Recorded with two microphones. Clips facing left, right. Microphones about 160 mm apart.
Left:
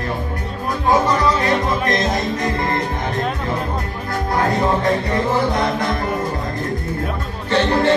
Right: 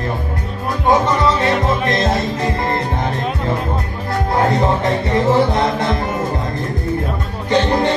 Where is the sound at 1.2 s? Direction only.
25° right (ahead or behind).